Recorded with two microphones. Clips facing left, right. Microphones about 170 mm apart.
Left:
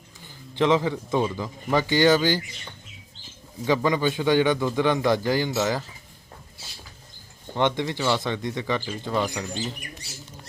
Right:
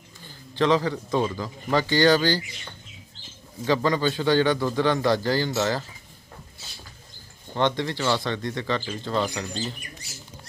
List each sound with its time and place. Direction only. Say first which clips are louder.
0.5 s a man's voice: even; 20° left (ahead or behind)
1.1 s speech: even; 5° left (ahead or behind)
1.4 s speech: even; 20° left (ahead or behind)
3.8 s speech: even; 15° left (ahead or behind)
7.5 s speech: even; 15° left (ahead or behind)